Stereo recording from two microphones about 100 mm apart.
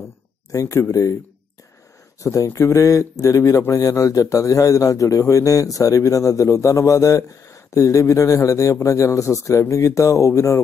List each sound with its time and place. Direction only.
0.5 s speech: 30° left (ahead or behind)
2.2 s speech: 30° left (ahead or behind)